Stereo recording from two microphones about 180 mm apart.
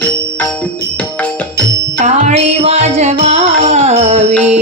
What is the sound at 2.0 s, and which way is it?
Music, 40° right (ahead or behind).